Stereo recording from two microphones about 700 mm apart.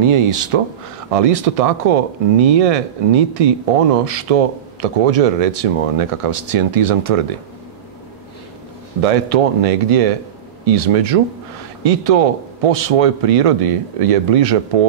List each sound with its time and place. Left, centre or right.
0.0 s a man's voice: right
1.1 s a man's voice: right
9.0 s a man's voice: right